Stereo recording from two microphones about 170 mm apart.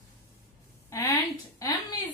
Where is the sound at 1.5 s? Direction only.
20° left (ahead or behind).